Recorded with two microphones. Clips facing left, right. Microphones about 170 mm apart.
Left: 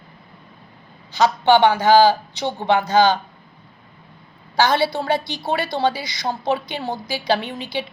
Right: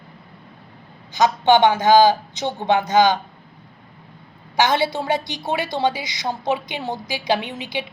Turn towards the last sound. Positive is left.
turn(degrees=-15)  # may be behind; listen again after turning